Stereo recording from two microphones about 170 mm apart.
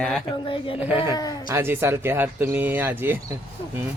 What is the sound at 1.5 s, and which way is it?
Speech, 15° right (ahead or behind).